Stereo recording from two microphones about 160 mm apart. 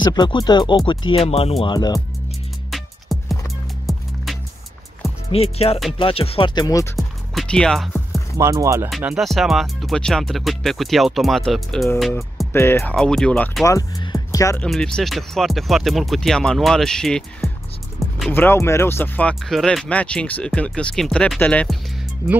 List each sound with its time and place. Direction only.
0.0 s speech: 25° left (ahead or behind)
2.7 s music: centre (ahead or behind)
5.3 s speech: 40° left (ahead or behind)
7.0 s music: 5° left (ahead or behind)
8.4 s speech: 20° right (ahead or behind)
9.0 s speech: centre (ahead or behind)
12.5 s speech: 15° left (ahead or behind)
12.9 s speech: 5° left (ahead or behind)
13.7 s music: 25° left (ahead or behind)
14.6 s speech: 5° left (ahead or behind)